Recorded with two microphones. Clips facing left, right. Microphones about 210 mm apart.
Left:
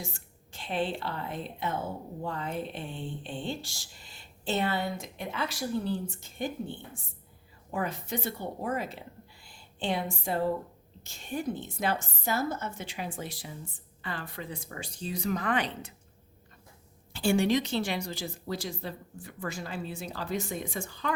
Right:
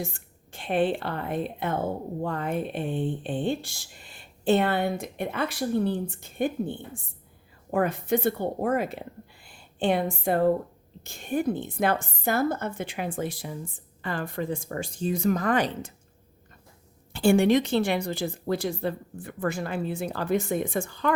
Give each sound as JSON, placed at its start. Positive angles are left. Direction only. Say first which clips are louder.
{"t": 0.0, "sound": "a woman's voice", "louder": "right 7 dB", "side_deg": -55}
{"t": 17.1, "sound": "a woman's voice", "louder": "right 6 dB", "side_deg": -55}